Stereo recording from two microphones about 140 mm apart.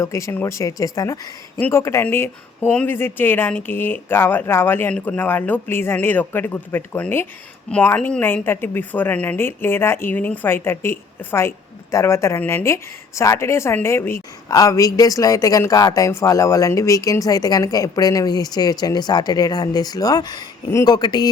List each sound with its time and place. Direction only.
0.0 s speech: 20° left (ahead or behind)